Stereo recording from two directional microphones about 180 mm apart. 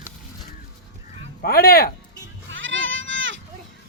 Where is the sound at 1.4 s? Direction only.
60° left (ahead or behind).